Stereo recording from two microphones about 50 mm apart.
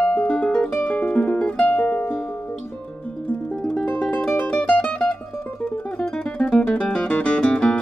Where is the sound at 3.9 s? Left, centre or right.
Left.